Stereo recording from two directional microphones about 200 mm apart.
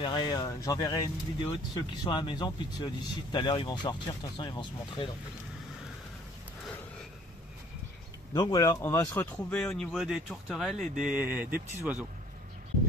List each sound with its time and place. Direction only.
0.0 s speech: 25° left (ahead or behind)
8.3 s speech: 15° left (ahead or behind); by 12.1 s 10° right (ahead or behind)